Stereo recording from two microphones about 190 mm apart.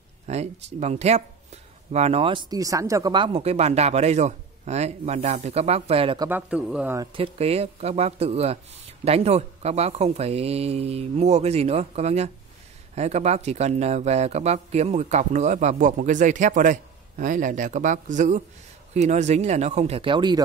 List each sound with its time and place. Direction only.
0.3 s speech: 35° right (ahead or behind)
6.2 s a man's voice: 10° right (ahead or behind)
7.0 s speech: 30° right (ahead or behind)